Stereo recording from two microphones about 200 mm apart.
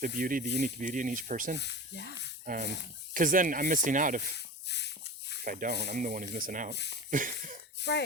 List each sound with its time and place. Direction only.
0.0 s speech: 45° right (ahead or behind)
1.6 s speech: 60° left (ahead or behind)
2.4 s speech: 40° right (ahead or behind)
4.4 s a sound: 60° left (ahead or behind)
5.5 s speech: 45° right (ahead or behind)
7.8 s a sound: 60° left (ahead or behind)